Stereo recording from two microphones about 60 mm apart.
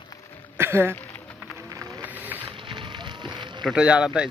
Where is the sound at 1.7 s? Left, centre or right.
Right.